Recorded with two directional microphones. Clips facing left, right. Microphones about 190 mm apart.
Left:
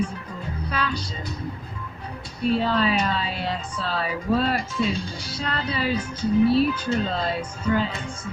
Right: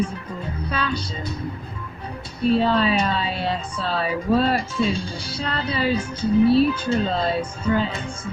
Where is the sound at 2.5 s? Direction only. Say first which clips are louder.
Right 3 dB; 30° right (ahead or behind).